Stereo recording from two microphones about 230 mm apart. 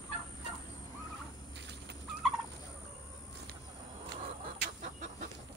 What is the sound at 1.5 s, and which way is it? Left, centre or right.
Bird, right.